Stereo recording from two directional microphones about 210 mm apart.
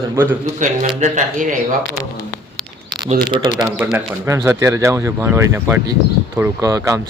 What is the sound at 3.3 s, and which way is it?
Speech, 25° right (ahead or behind).